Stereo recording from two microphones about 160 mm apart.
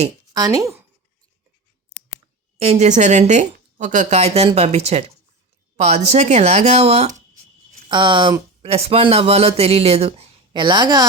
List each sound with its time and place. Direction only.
0.3 s speech: 20° right (ahead or behind)
2.6 s a woman's voice: 45° right (ahead or behind)
7.9 s speech: 30° right (ahead or behind)